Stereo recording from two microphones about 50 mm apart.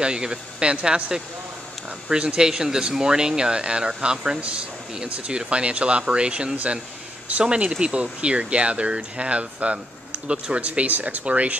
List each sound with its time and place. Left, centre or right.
0.0 s speech: centre